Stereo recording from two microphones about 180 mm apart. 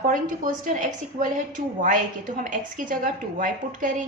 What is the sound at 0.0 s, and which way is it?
A woman's voice, 50° right (ahead or behind).